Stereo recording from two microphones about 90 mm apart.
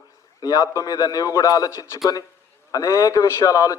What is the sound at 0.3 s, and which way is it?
A man's voice, 45° left (ahead or behind).